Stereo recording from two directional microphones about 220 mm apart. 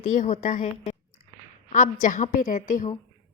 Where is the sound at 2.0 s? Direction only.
35° left (ahead or behind).